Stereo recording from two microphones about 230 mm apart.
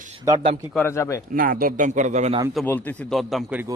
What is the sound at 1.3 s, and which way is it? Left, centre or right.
A man's voice, right.